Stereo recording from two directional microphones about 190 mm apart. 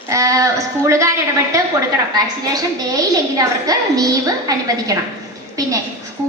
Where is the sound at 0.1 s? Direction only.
15° right (ahead or behind).